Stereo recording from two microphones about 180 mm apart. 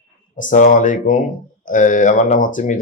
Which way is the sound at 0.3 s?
45° left (ahead or behind).